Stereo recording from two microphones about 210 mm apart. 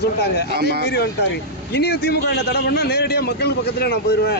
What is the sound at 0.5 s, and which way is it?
Speech, 50° right (ahead or behind).